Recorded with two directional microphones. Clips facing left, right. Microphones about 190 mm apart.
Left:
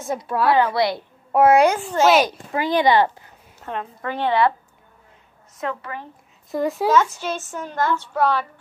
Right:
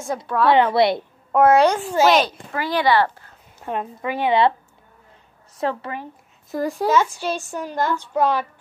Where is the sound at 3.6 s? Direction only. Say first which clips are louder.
Right 3 dB; 15° right (ahead or behind).